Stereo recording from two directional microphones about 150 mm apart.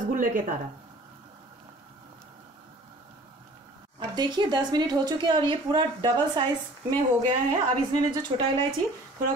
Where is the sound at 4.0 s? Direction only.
30° right (ahead or behind).